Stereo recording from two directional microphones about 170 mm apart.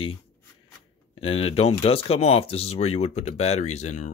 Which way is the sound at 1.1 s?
35° left (ahead or behind).